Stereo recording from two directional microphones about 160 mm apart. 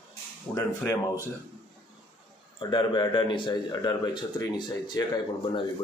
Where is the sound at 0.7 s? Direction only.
15° left (ahead or behind).